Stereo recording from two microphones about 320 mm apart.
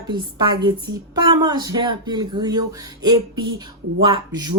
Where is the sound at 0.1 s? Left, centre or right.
Centre.